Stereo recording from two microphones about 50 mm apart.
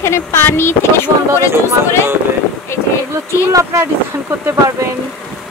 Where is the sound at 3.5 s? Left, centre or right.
Right.